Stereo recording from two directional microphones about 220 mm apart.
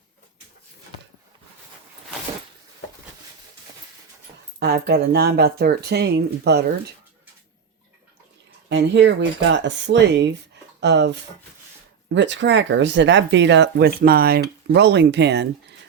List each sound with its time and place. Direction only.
4.6 s speech: 45° right (ahead or behind)
8.7 s speech: 55° right (ahead or behind)